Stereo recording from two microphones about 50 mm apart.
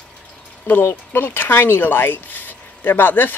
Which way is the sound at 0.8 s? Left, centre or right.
Left.